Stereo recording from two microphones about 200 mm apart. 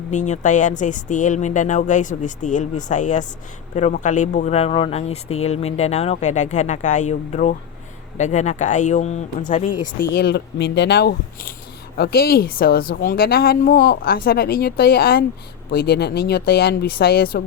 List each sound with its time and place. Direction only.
0.1 s speech: 35° left (ahead or behind)
10.0 s speech: 55° left (ahead or behind)